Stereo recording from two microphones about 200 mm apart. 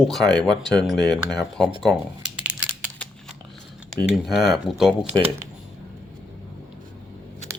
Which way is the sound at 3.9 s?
Centre (ahead or behind).